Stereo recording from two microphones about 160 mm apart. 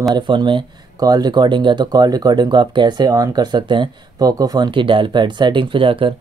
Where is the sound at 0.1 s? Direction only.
30° right (ahead or behind).